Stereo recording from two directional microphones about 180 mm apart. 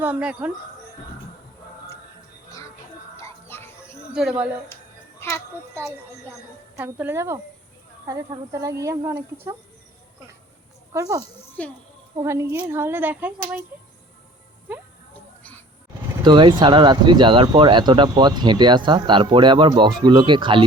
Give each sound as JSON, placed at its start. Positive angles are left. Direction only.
{"t": 0.0, "sound": "a woman's voice", "side_deg": -5}
{"t": 3.2, "sound": "music", "side_deg": 15}
{"t": 4.1, "sound": "speech", "side_deg": -5}
{"t": 5.2, "sound": "a child's voice", "side_deg": 15}
{"t": 6.7, "sound": "a woman's voice", "side_deg": -10}
{"t": 10.9, "sound": "a woman's voice", "side_deg": -20}
{"t": 11.6, "sound": "a child's voice", "side_deg": 5}
{"t": 12.1, "sound": "a woman's voice", "side_deg": -15}
{"t": 16.2, "sound": "speech", "side_deg": -25}